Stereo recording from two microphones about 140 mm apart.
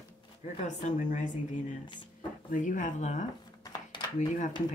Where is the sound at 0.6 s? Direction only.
55° left (ahead or behind).